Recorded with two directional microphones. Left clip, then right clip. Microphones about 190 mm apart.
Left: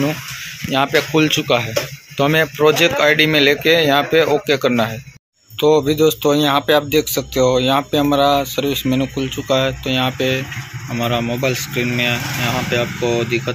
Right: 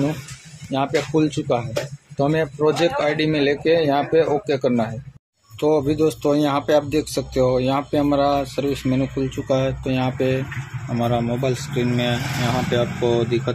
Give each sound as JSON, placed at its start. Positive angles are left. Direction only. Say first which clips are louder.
{"t": 0.7, "sound": "speech", "louder": "left 5 dB", "side_deg": 5}